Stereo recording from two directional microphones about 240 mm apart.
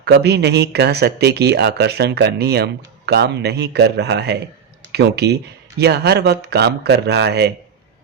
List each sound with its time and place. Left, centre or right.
0.0 s speech: right